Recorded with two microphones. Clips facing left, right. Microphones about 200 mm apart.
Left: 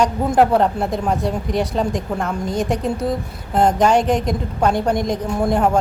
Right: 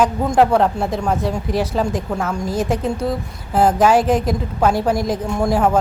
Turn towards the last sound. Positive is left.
turn(degrees=0)  # may be behind; listen again after turning